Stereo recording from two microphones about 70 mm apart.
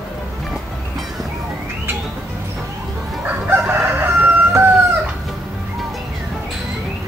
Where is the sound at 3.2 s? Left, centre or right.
Right.